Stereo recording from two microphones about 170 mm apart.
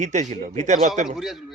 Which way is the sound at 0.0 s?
45° right (ahead or behind).